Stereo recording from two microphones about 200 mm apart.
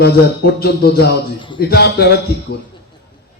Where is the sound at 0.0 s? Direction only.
55° left (ahead or behind).